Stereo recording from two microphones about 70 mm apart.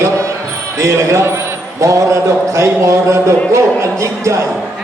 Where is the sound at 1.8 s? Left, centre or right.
Right.